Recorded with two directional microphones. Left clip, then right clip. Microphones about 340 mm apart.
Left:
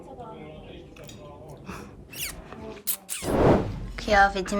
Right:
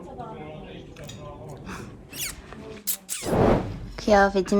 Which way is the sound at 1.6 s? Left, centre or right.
Centre.